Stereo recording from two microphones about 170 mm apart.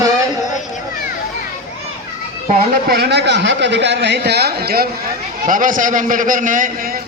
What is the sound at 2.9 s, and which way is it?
A man's voice, 75° right (ahead or behind).